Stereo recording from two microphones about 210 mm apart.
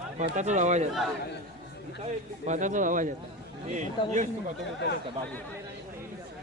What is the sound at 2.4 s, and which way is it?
A man's voice, 35° right (ahead or behind).